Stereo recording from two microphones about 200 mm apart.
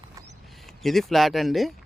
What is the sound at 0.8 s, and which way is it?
Speech, centre (ahead or behind).